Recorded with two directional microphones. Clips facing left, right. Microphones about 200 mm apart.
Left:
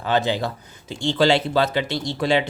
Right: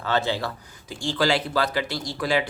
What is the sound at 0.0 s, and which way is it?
Speech, 15° left (ahead or behind).